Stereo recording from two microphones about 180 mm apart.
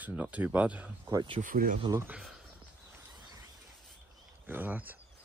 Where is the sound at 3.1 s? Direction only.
20° right (ahead or behind).